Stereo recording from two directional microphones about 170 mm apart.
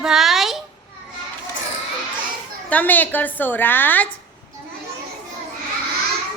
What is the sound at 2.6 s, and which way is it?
A woman's voice, 10° left (ahead or behind).